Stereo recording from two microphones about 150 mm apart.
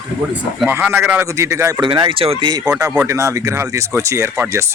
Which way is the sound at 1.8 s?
35° right (ahead or behind).